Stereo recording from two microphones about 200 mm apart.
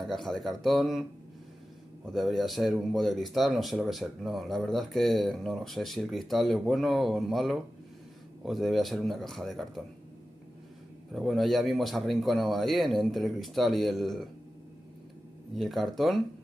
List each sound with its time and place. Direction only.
0.0 s speech: centre (ahead or behind)
2.0 s speech: centre (ahead or behind)
11.1 s speech: centre (ahead or behind)
15.5 s speech: centre (ahead or behind)